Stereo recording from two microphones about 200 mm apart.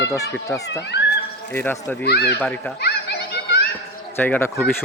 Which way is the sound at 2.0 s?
55° left (ahead or behind).